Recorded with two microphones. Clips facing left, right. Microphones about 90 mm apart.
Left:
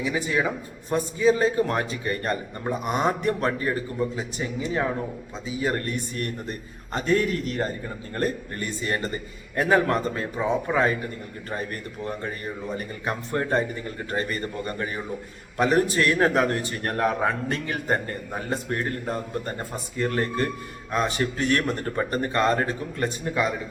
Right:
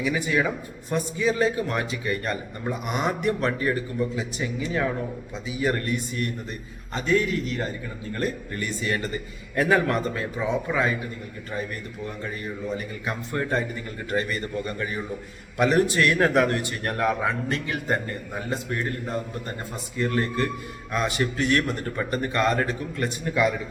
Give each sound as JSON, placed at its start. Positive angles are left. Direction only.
{"t": 0.0, "sound": "a man's voice", "side_deg": 25}
{"t": 11.5, "sound": "a man's voice", "side_deg": 45}